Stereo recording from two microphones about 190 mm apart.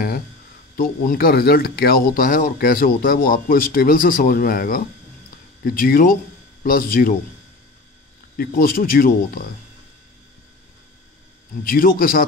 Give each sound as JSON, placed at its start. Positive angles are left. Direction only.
{"t": 0.7, "sound": "speech", "side_deg": 50}
{"t": 8.4, "sound": "speech", "side_deg": 50}
{"t": 11.6, "sound": "speech", "side_deg": 50}